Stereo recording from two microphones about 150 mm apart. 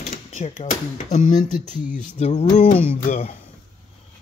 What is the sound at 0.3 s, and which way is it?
Speech, 55° left (ahead or behind).